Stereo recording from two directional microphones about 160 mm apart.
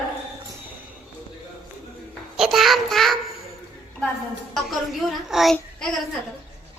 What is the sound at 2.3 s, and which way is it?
Child singing, centre (ahead or behind).